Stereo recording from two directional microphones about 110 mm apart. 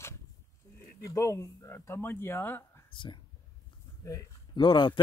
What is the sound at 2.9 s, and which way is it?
Speech, 45° left (ahead or behind).